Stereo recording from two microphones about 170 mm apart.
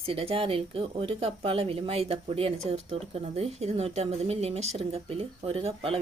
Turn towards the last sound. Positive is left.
turn(degrees=-35)  # may be behind; listen again after turning